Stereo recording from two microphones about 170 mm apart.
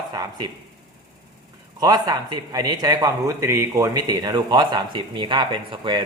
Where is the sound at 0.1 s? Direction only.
20° right (ahead or behind).